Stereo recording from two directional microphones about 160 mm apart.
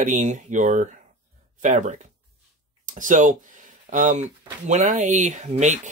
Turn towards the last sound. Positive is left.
turn(degrees=-45)  # may be behind; listen again after turning